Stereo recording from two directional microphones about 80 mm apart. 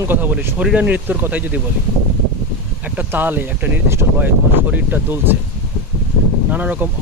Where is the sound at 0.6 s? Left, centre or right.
Centre.